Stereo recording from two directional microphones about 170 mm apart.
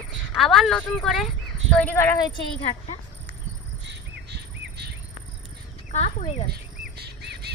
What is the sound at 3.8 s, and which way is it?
Bird, 80° right.